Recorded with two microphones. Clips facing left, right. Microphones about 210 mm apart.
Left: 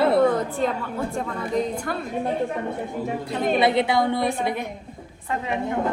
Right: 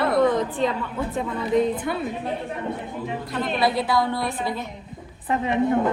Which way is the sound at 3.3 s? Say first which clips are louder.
Left 3 dB; 25° left (ahead or behind).